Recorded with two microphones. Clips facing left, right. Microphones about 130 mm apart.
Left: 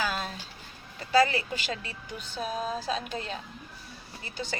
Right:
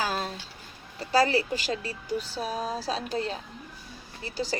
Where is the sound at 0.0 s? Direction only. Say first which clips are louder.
Right 2 dB; 40° right (ahead or behind).